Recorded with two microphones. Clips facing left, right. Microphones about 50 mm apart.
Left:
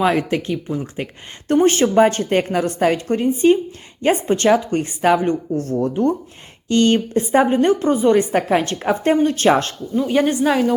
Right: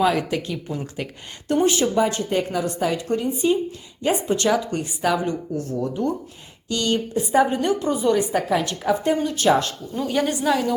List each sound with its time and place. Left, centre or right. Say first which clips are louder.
0.0 s a woman's voice: left 3 dB; left
1.5 s a woman's voice: left 5 dB; left
10.1 s a woman's voice: left 4 dB; left